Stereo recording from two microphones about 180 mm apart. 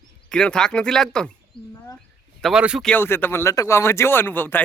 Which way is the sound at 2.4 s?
5° right (ahead or behind).